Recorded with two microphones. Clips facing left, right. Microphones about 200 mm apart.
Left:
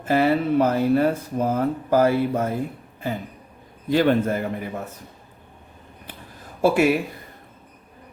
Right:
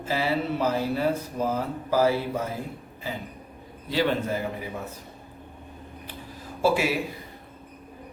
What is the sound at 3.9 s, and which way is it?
Speech, 50° left (ahead or behind).